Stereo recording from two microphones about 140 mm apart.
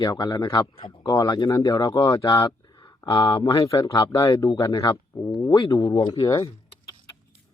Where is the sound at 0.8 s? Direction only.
40° left (ahead or behind).